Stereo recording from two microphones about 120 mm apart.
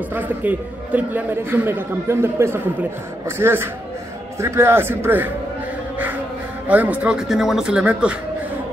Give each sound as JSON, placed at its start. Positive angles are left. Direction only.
{"t": 0.1, "sound": "a man's voice", "side_deg": -15}
{"t": 6.7, "sound": "speech", "side_deg": -15}